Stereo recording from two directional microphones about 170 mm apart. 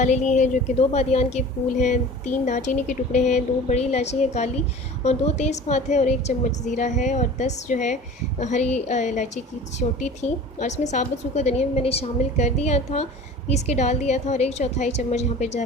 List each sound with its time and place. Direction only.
0.0 s a woman's voice: 45° left (ahead or behind)